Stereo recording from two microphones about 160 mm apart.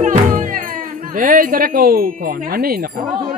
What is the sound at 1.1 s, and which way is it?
Music, 60° right (ahead or behind).